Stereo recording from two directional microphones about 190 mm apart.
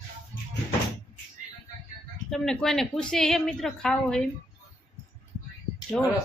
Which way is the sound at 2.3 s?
5° left (ahead or behind).